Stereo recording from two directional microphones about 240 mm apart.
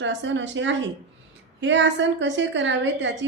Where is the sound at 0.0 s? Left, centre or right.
Right.